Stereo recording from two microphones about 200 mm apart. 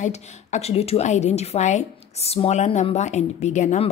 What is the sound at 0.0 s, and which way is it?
Speech, 35° left (ahead or behind).